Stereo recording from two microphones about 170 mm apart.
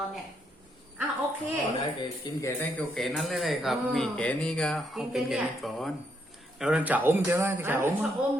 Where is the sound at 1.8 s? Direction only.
25° left (ahead or behind).